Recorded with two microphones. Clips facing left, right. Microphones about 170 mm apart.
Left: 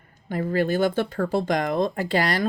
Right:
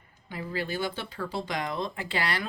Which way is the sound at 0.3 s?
50° left (ahead or behind).